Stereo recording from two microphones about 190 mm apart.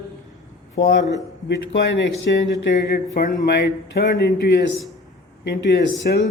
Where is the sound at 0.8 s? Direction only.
65° left (ahead or behind).